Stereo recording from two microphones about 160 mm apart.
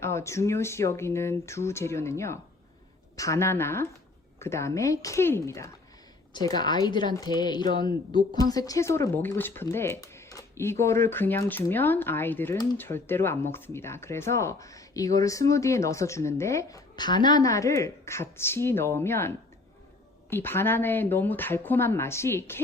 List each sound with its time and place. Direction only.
0.0 s a woman's voice: 15° left (ahead or behind)
20.3 s speech: 15° left (ahead or behind)